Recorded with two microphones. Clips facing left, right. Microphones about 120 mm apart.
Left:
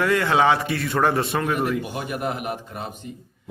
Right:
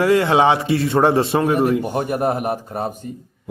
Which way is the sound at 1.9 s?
45° right (ahead or behind).